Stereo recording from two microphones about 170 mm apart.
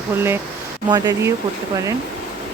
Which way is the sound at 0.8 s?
25° right (ahead or behind).